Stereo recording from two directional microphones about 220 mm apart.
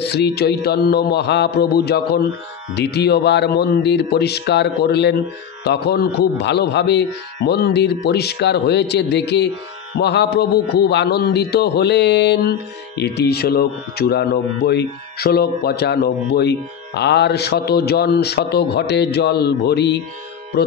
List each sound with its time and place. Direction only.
0.0 s a man's voice: 50° left (ahead or behind)